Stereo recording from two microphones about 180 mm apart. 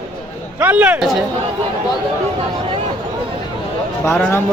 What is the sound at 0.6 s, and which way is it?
Speech, 5° right (ahead or behind).